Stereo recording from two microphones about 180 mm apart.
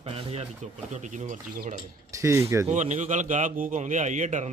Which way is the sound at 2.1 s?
15° right (ahead or behind).